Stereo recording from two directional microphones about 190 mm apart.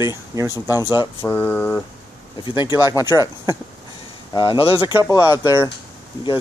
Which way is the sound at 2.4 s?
25° left (ahead or behind).